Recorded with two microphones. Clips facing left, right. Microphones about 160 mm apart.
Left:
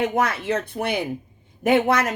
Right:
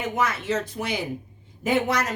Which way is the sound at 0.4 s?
55° left (ahead or behind).